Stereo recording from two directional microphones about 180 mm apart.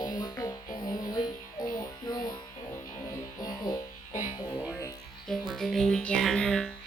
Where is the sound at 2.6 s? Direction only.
15° left (ahead or behind).